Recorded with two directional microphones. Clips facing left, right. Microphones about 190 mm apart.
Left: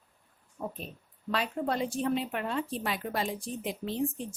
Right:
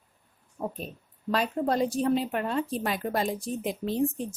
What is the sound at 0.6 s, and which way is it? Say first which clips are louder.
A woman's voice: right 4 dB; 40° right (ahead or behind).